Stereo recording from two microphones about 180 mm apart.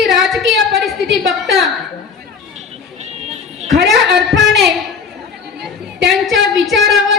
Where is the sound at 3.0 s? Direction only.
35° right (ahead or behind).